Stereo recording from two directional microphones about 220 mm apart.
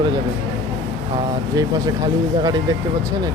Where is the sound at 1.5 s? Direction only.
15° right (ahead or behind).